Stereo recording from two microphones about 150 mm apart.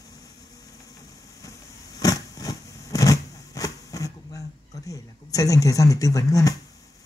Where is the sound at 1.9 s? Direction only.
25° left (ahead or behind).